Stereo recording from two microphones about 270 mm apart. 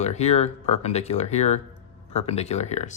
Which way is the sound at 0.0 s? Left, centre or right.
Left.